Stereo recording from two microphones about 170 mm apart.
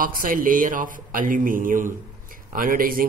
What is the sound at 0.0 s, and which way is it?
A man's voice, 55° right (ahead or behind).